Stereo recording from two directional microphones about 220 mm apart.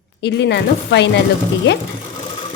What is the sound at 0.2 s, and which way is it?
Speech, 50° left (ahead or behind).